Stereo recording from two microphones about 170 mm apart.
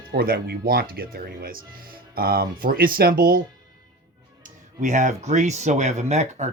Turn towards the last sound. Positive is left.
turn(degrees=-40)  # may be behind; listen again after turning